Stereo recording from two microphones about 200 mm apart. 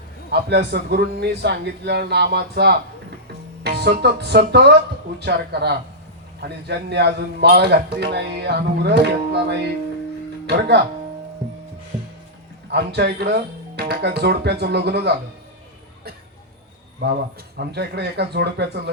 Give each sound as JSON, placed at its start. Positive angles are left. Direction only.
{"t": 0.3, "sound": "a man's voice", "side_deg": -55}
{"t": 12.7, "sound": "a man's voice", "side_deg": -55}
{"t": 17.6, "sound": "a man's voice", "side_deg": -55}